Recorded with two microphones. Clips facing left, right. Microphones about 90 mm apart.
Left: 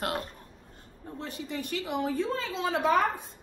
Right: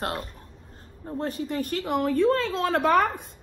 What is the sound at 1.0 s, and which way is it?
A woman's voice, 45° right (ahead or behind).